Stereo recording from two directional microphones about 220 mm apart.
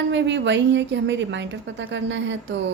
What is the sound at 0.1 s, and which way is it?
A woman's voice, 55° right (ahead or behind).